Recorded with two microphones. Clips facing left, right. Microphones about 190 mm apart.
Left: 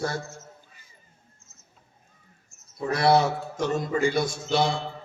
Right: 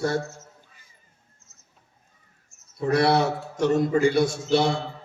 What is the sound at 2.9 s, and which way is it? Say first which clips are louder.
A man's voice: even; 65° right (ahead or behind).